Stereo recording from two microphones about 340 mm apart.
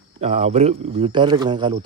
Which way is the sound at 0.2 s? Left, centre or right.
Centre.